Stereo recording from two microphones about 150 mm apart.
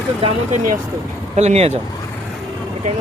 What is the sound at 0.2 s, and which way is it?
Speech, 40° right (ahead or behind).